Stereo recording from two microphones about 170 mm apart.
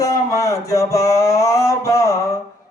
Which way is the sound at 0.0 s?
20° left (ahead or behind).